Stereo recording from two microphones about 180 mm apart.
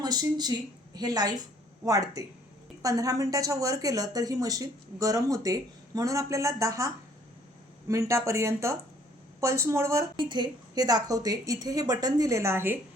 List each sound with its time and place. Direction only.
0.0 s a woman's voice: 20° right (ahead or behind)